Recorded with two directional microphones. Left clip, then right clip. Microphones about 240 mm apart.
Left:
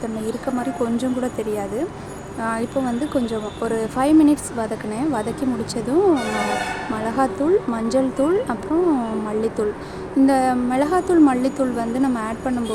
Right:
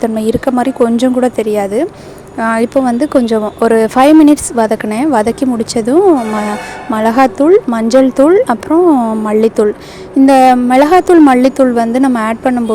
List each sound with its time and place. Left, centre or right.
0.0 s a woman's voice: right